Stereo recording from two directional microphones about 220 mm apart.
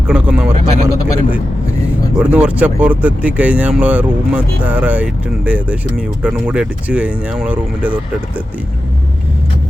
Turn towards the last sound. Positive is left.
turn(degrees=-5)  # may be behind; listen again after turning